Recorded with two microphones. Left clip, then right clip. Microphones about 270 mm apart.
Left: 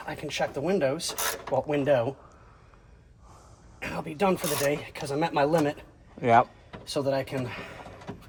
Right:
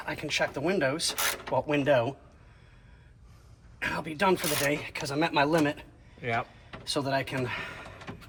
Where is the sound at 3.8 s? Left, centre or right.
Centre.